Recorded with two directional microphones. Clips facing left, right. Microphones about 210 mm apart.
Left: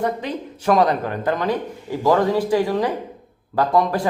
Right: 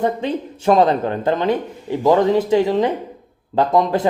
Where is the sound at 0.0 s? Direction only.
25° right (ahead or behind).